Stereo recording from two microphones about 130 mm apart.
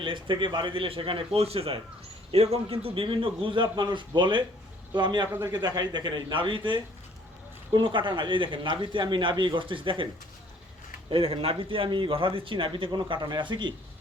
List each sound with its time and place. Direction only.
0.0 s speech: 40° right (ahead or behind)
11.1 s speech: 45° right (ahead or behind)